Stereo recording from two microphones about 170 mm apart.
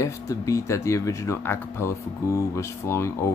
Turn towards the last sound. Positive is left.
turn(degrees=15)  # may be behind; listen again after turning